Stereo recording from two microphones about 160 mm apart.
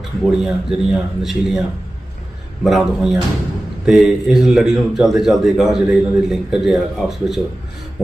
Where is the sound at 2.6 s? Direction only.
Centre (ahead or behind).